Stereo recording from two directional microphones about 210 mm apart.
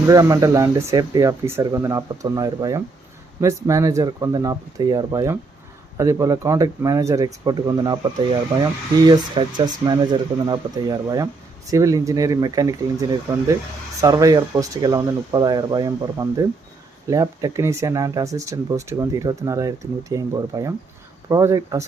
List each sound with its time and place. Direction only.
0.1 s speech: 15° right (ahead or behind)